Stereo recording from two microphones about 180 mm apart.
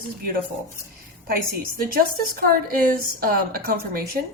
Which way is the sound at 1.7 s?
55° right (ahead or behind).